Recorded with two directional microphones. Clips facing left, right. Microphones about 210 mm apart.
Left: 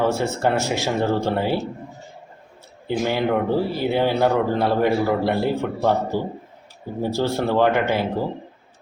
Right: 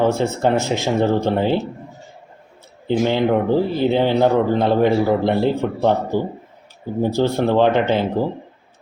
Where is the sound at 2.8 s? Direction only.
20° right (ahead or behind).